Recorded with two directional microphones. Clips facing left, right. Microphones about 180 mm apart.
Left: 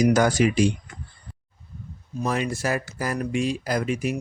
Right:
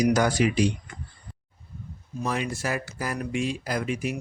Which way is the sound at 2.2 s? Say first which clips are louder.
Left 3 dB; 40° left (ahead or behind).